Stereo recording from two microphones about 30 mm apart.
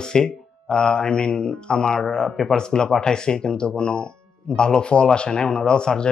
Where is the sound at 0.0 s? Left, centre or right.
Left.